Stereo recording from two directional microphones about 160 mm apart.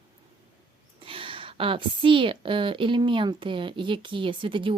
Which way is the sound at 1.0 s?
35° right (ahead or behind).